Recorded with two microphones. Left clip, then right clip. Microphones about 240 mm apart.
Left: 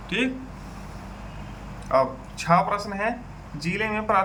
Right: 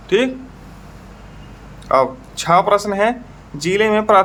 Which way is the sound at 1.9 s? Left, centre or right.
Right.